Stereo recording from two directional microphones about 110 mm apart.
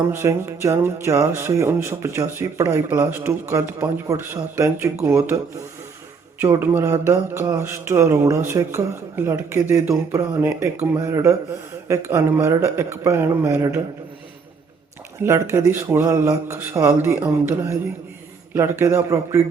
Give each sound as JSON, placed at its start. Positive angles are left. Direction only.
{"t": 0.1, "sound": "speech", "side_deg": -25}
{"t": 6.4, "sound": "speech", "side_deg": -20}
{"t": 15.2, "sound": "speech", "side_deg": -25}